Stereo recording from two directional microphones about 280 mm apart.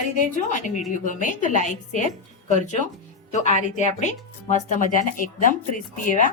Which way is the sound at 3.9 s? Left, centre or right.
Left.